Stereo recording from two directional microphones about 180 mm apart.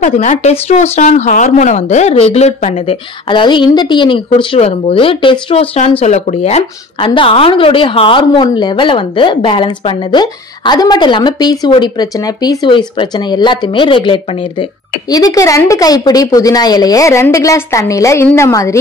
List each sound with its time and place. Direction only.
0.0 s speech: 45° left (ahead or behind); by 18.8 s 15° left (ahead or behind)